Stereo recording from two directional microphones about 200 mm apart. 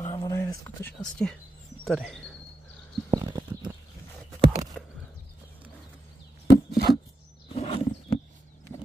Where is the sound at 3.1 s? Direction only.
20° right (ahead or behind).